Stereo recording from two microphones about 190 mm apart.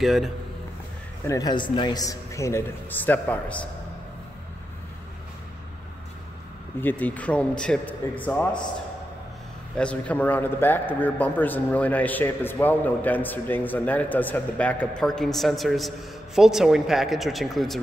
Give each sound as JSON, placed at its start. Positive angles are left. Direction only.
{"t": 0.0, "sound": "speech", "side_deg": 0}
{"t": 1.2, "sound": "a man's voice", "side_deg": 20}
{"t": 6.8, "sound": "a man's voice", "side_deg": 10}
{"t": 9.8, "sound": "a man's voice", "side_deg": 5}